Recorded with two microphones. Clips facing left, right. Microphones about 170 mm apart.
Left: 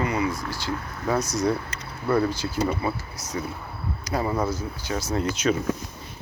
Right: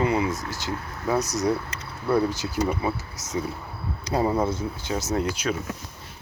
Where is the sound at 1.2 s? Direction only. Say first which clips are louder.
Right 2 dB; 40° right (ahead or behind).